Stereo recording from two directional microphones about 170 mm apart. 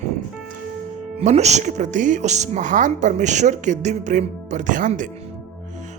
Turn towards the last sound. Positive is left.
turn(degrees=-50)  # may be behind; listen again after turning